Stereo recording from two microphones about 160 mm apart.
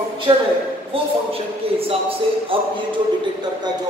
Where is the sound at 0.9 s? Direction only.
35° right (ahead or behind).